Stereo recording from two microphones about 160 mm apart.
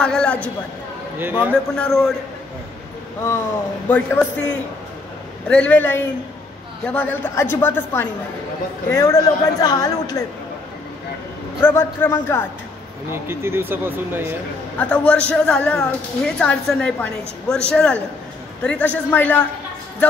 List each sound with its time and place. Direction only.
0.0 s a sound: 5° left (ahead or behind)
1.2 s speech: 10° right (ahead or behind)
1.8 s a man's voice: 5° left (ahead or behind)
3.9 s a woman's voice: 10° left (ahead or behind)
11.6 s a woman's voice: 15° left (ahead or behind)
13.1 s speech: 15° right (ahead or behind)
14.8 s a woman's voice: 5° left (ahead or behind)